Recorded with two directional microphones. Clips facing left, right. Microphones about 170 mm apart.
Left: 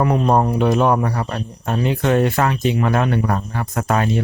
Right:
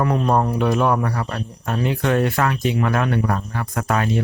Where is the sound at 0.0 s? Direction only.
20° left (ahead or behind).